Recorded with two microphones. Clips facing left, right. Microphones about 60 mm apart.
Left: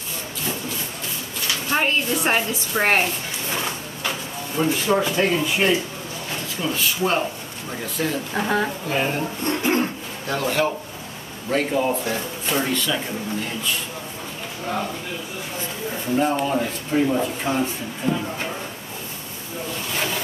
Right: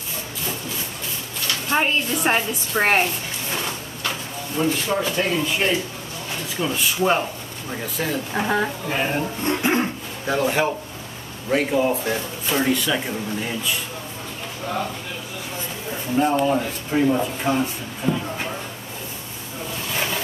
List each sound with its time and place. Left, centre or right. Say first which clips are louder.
1.7 s speech: even; centre
4.6 s speech: left 2 dB; centre
6.6 s speech: right 2 dB; centre
7.8 s speech: left 1 dB; centre
16.2 s speech: right 2 dB; centre